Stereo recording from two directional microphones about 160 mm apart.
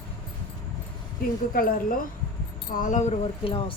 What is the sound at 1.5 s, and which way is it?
Speech, 60° left (ahead or behind).